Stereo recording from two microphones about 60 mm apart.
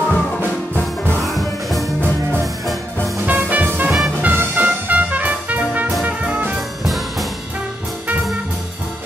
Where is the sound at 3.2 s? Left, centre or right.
Right.